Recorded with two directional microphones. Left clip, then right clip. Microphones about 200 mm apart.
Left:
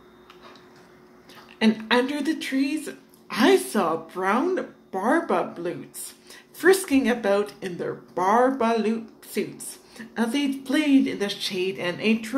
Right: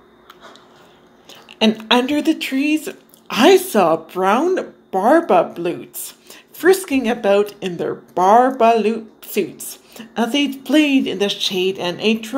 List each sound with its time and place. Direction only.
1.6 s speech: 30° right (ahead or behind)